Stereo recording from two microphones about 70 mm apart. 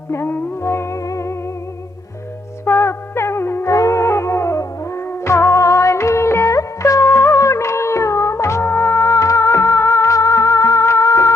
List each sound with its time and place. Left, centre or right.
0.1 s music: left
2.6 s music: left